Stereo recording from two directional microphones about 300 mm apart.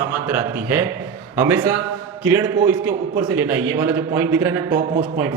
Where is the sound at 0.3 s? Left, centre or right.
Centre.